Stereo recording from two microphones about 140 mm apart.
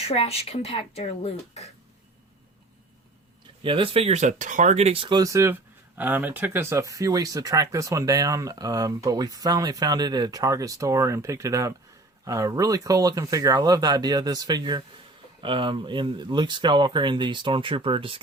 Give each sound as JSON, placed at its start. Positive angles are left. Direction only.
{"t": 0.1, "sound": "speech", "side_deg": 45}
{"t": 3.6, "sound": "speech", "side_deg": -40}